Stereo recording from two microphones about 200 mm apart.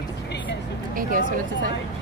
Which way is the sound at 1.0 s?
45° right (ahead or behind).